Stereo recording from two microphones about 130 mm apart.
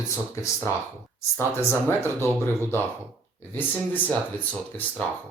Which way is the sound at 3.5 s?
15° left (ahead or behind).